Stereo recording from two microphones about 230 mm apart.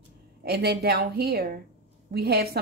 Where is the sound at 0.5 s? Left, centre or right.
Right.